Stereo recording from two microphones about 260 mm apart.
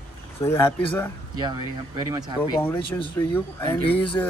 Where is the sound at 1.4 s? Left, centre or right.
Centre.